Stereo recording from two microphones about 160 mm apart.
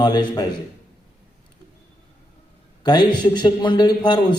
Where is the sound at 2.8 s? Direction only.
30° left (ahead or behind).